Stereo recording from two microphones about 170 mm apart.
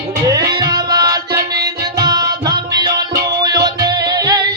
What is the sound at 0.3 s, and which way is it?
Music, 20° right (ahead or behind).